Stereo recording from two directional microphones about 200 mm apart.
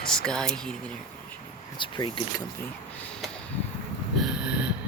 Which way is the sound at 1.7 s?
25° left (ahead or behind).